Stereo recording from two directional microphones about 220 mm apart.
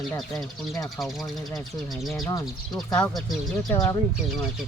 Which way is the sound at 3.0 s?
Centre (ahead or behind).